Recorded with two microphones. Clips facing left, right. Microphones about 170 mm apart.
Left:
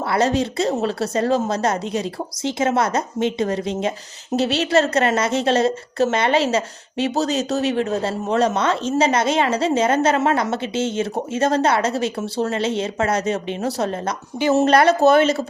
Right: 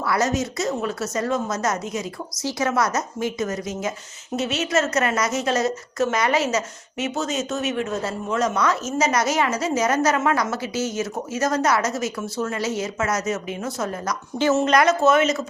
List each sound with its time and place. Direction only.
0.0 s speech: 30° left (ahead or behind)